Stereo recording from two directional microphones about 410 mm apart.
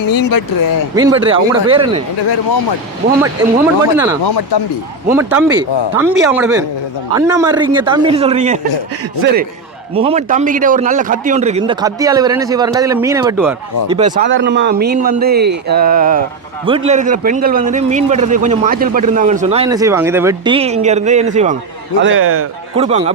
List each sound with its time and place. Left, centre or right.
0.1 s speech: left
0.9 s a man's voice: centre
3.9 s a man's voice: centre
4.2 s speech: left
5.0 s a man's voice: centre
13.9 s a man's voice: centre
22.0 s a man's voice: right
22.7 s a man's voice: centre